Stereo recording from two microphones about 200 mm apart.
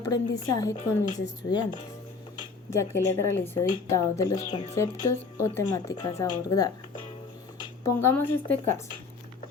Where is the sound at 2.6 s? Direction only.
15° left (ahead or behind).